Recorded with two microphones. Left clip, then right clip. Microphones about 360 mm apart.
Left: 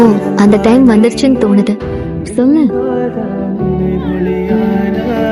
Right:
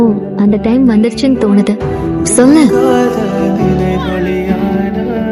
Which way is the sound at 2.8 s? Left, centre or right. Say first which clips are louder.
Right 5 dB; right.